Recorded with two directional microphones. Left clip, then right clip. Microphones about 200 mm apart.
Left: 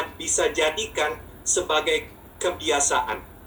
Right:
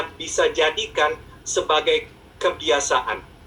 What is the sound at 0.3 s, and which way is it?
Speech, 30° left (ahead or behind).